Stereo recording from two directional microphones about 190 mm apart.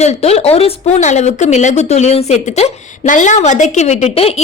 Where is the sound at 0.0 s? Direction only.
35° left (ahead or behind).